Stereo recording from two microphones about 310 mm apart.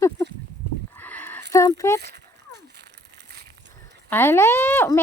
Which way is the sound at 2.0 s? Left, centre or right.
Right.